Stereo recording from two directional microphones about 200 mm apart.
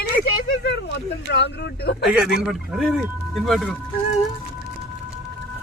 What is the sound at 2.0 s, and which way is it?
Speech, 5° right (ahead or behind).